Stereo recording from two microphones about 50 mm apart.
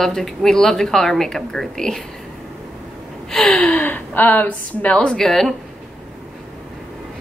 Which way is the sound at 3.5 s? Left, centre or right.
Left.